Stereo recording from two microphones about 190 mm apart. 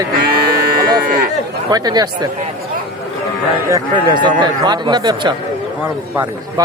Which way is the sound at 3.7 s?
25° right (ahead or behind).